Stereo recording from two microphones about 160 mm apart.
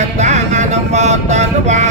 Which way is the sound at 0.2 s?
45° right (ahead or behind).